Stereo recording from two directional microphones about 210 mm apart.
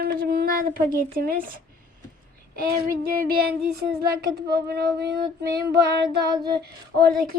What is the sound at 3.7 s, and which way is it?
Child singing, 50° right (ahead or behind).